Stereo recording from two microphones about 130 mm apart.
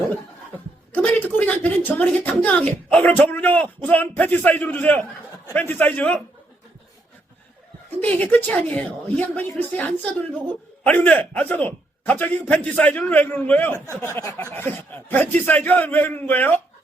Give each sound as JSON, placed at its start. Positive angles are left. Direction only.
{"t": 0.9, "sound": "a woman's voice", "side_deg": 15}
{"t": 8.0, "sound": "a woman's voice", "side_deg": 15}
{"t": 14.0, "sound": "a sound", "side_deg": 20}
{"t": 14.5, "sound": "a woman's voice", "side_deg": 15}